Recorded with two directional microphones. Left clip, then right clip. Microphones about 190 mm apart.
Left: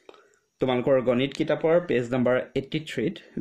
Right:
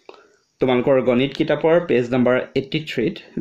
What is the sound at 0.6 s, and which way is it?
Speech, 40° left (ahead or behind).